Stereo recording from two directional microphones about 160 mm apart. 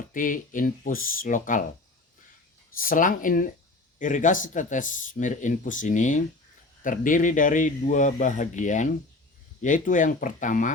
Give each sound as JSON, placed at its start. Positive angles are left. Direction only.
{"t": 0.1, "sound": "speech", "side_deg": 55}
{"t": 2.7, "sound": "speech", "side_deg": 60}